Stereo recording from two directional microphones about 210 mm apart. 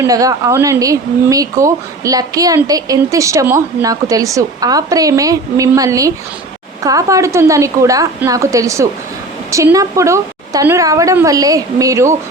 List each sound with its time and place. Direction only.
0.0 s speech: 15° right (ahead or behind)